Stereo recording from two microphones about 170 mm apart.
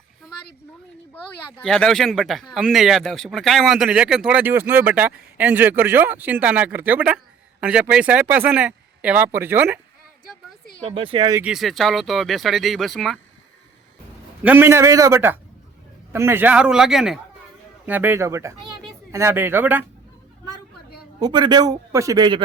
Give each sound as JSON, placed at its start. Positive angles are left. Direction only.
{"t": 1.1, "sound": "speech", "side_deg": 5}
{"t": 10.8, "sound": "speech", "side_deg": -30}
{"t": 11.4, "sound": "speech", "side_deg": 0}
{"t": 14.4, "sound": "speech", "side_deg": -10}
{"t": 21.2, "sound": "a man's voice", "side_deg": -25}